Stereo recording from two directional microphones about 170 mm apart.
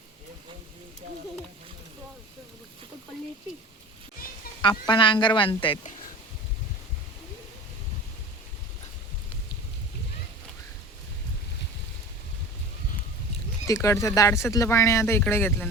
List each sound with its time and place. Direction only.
4.6 s speech: 25° left (ahead or behind)
13.7 s speech: 20° left (ahead or behind)